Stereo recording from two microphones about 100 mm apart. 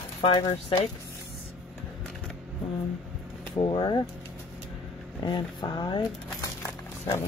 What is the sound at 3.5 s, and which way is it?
Speech, 55° left (ahead or behind).